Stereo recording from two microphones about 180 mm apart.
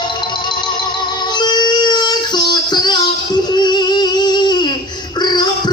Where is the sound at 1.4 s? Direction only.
25° left (ahead or behind).